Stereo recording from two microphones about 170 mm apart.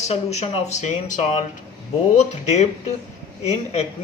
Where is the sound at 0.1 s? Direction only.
40° left (ahead or behind).